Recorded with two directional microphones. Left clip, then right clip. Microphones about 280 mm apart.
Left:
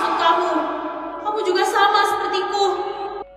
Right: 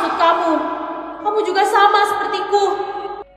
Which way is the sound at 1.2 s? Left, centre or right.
Right.